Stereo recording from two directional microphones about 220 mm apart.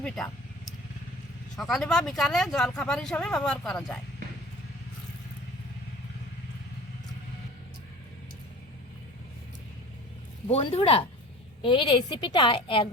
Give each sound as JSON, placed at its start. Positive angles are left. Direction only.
{"t": 1.5, "sound": "speech", "side_deg": 0}
{"t": 10.5, "sound": "a woman's voice", "side_deg": 25}